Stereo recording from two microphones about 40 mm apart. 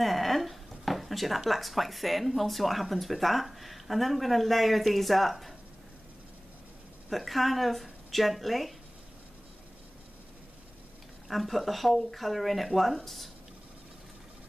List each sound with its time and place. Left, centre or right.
0.0 s speech: centre
7.1 s speech: centre
11.2 s speech: centre